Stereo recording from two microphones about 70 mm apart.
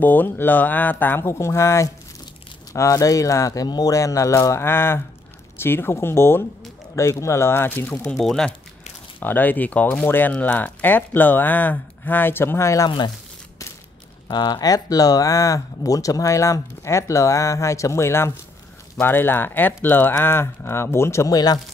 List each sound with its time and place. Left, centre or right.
0.0 s speech: left
3.6 s a man's voice: left
3.9 s speech: left
8.2 s speech: centre
9.2 s speech: left
14.2 s speech: left
21.3 s speech: left